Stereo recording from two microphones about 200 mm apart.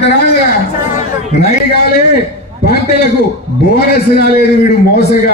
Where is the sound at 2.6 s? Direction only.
55° left (ahead or behind).